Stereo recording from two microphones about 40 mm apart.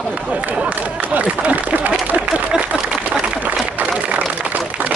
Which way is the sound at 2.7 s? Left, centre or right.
Right.